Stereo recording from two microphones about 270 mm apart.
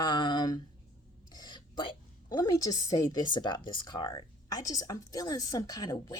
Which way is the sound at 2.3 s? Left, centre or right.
Centre.